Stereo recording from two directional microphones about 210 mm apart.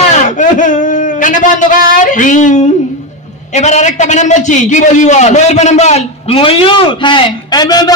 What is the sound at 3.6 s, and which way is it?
A man's voice, 35° left (ahead or behind).